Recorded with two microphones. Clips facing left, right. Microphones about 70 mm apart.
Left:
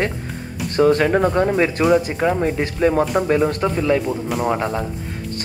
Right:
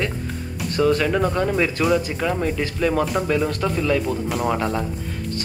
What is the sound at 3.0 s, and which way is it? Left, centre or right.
Speech, centre.